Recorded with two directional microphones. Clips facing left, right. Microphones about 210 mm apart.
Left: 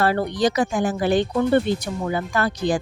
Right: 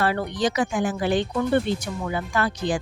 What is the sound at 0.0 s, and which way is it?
Speech, 40° left (ahead or behind).